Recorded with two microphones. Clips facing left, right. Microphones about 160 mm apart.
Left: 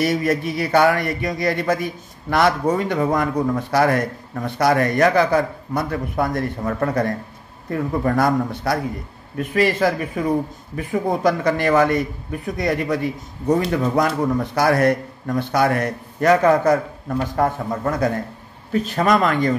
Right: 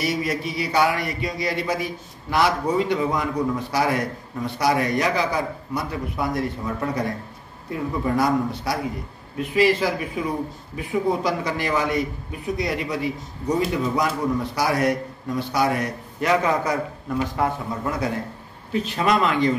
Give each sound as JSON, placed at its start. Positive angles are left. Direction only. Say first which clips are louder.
{"t": 0.0, "sound": "speech", "louder": "left 5 dB", "side_deg": 50}